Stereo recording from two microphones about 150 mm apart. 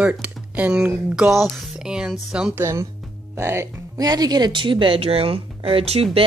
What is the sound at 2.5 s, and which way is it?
Speech, 20° right (ahead or behind).